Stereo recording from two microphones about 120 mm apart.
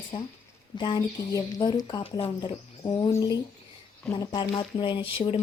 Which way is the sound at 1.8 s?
50° left (ahead or behind).